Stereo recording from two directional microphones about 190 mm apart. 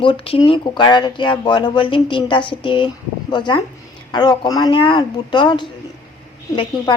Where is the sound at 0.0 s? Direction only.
25° left (ahead or behind).